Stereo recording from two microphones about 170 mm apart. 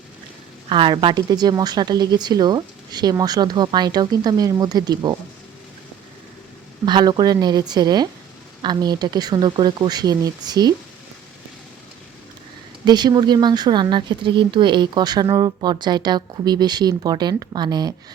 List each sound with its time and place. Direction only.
0.7 s speech: 30° right (ahead or behind)
6.8 s speech: 25° right (ahead or behind)
12.8 s speech: 25° right (ahead or behind)